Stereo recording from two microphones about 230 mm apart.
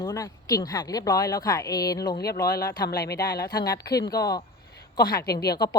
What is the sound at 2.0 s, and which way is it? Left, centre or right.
Speech, left.